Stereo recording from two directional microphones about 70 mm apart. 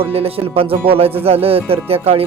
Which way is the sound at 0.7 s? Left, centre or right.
Right.